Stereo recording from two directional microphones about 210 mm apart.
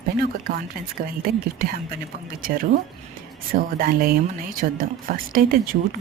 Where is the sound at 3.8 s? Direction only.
45° right (ahead or behind).